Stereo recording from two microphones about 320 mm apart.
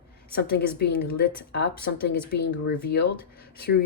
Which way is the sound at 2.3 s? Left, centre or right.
Left.